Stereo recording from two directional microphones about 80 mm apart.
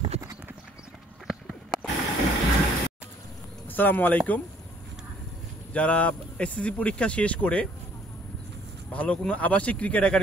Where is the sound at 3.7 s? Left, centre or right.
Left.